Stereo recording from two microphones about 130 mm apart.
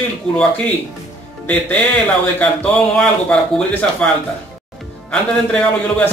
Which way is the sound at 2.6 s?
5° left (ahead or behind).